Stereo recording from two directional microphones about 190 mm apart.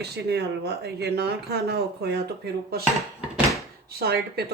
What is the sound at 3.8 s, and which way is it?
Speech, 55° right (ahead or behind).